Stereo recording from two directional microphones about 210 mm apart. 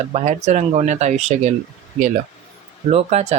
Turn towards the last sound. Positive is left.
turn(degrees=-30)  # may be behind; listen again after turning